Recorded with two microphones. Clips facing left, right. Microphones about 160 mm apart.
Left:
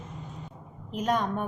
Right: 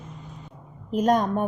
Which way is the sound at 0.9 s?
40° right (ahead or behind).